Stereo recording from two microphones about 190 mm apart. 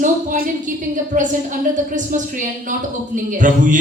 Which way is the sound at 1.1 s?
40° right (ahead or behind).